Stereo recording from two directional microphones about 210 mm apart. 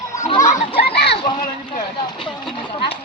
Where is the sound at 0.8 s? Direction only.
50° left (ahead or behind).